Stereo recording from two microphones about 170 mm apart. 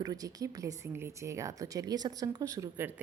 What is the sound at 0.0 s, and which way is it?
Speech, 20° right (ahead or behind).